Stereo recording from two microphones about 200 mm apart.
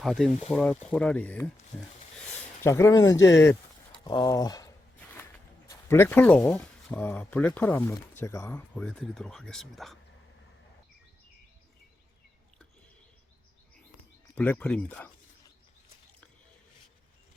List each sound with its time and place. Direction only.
0.0 s speech: centre (ahead or behind)
2.6 s speech: 15° left (ahead or behind)
14.3 s speech: 5° left (ahead or behind)